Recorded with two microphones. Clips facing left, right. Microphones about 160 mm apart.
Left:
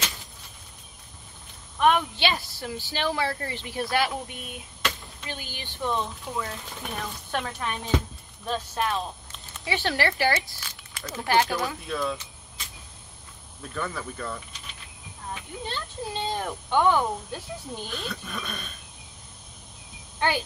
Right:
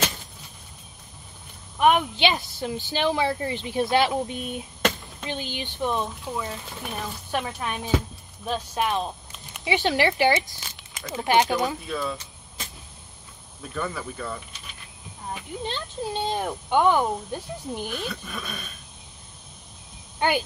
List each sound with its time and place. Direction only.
1.8 s speech: 15° right (ahead or behind)
11.8 s speech: centre (ahead or behind)
13.6 s speech: 5° right (ahead or behind)
15.6 s speech: 15° right (ahead or behind)
17.9 s speech: centre (ahead or behind)
20.2 s speech: 15° right (ahead or behind)